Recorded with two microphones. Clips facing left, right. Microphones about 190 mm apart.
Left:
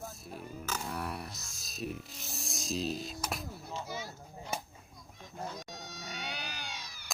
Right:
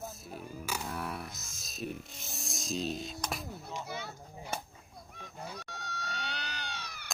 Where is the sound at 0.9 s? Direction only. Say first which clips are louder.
Even; centre (ahead or behind).